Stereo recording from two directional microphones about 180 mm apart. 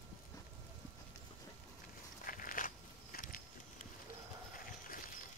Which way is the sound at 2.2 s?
50° left (ahead or behind).